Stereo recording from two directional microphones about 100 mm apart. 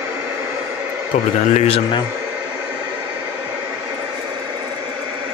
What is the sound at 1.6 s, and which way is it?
Speech, 90° left.